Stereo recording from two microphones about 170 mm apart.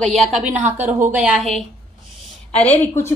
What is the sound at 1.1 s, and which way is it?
Speech, 5° right (ahead or behind).